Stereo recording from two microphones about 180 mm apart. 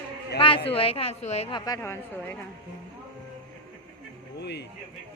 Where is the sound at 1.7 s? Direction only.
15° left (ahead or behind).